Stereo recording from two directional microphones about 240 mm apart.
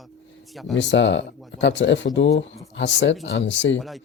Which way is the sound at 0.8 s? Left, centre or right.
Left.